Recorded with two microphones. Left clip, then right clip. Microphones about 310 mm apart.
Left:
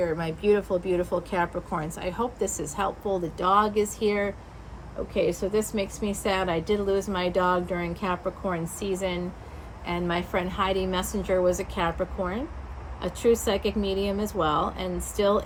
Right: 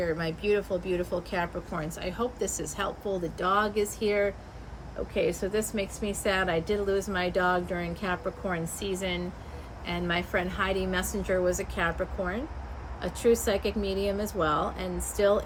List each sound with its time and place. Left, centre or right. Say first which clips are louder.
0.4 s a woman's voice: left 5 dB; left